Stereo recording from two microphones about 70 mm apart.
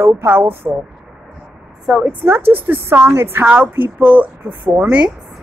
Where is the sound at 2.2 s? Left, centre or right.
Right; by 5.1 s centre.